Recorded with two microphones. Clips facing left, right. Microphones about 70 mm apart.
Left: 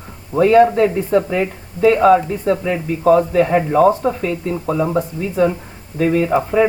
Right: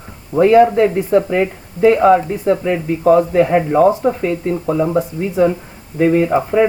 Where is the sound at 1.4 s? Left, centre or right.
Right.